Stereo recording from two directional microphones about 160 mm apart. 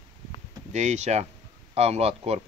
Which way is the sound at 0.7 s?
45° right (ahead or behind).